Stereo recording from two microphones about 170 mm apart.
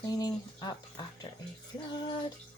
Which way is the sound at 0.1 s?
25° left (ahead or behind).